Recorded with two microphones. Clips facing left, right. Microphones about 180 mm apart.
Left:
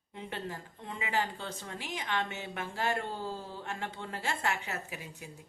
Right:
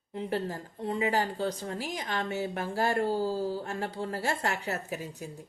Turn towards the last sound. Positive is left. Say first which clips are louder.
# right 7 dB
turn(degrees=-40)  # may be behind; listen again after turning